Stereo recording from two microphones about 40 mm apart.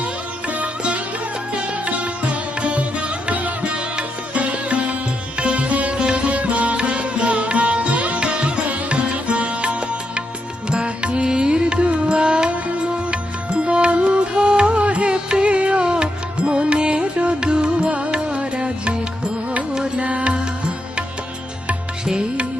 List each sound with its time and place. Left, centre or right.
0.0 s music: right